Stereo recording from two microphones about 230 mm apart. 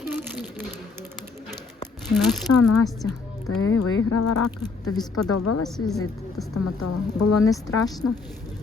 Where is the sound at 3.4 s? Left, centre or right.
Left.